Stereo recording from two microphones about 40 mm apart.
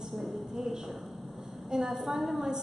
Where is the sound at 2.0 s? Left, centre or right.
Centre.